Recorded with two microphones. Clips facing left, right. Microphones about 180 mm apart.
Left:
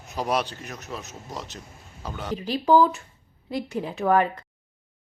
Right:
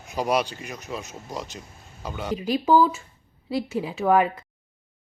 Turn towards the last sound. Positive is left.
turn(degrees=-5)  # may be behind; listen again after turning